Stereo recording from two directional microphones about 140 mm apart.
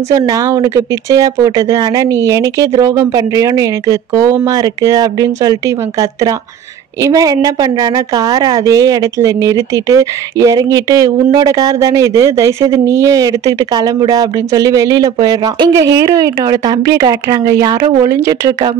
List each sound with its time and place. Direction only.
0.1 s speech: 25° right (ahead or behind)
7.1 s speech: 25° right (ahead or behind)